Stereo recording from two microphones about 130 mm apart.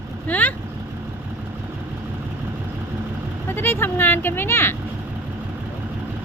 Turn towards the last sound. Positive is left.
turn(degrees=15)  # may be behind; listen again after turning